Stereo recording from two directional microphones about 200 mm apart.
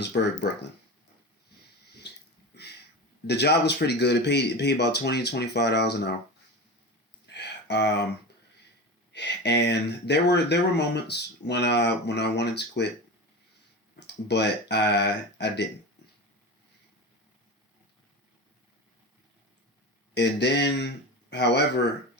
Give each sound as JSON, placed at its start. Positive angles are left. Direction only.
{"t": 0.0, "sound": "speech", "side_deg": 60}
{"t": 3.2, "sound": "speech", "side_deg": 55}
{"t": 7.3, "sound": "a sound", "side_deg": 60}
{"t": 9.1, "sound": "speech", "side_deg": 60}
{"t": 14.3, "sound": "speech", "side_deg": 60}
{"t": 20.1, "sound": "speech", "side_deg": 60}